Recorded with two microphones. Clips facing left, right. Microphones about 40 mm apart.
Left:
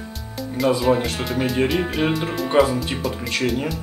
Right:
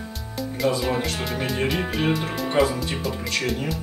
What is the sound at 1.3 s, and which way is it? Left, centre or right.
Speech, centre.